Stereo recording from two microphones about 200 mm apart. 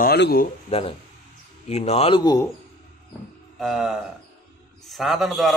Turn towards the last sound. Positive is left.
turn(degrees=0)  # may be behind; listen again after turning